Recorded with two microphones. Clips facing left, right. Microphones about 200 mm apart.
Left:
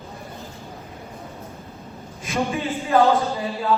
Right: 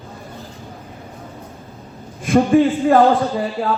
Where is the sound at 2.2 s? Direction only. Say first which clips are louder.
Right 12 dB; 55° right (ahead or behind).